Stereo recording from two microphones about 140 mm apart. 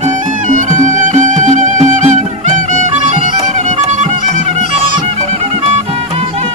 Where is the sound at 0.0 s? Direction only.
60° right (ahead or behind).